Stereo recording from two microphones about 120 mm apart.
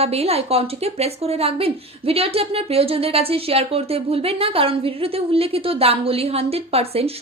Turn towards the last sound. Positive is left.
turn(degrees=-55)  # may be behind; listen again after turning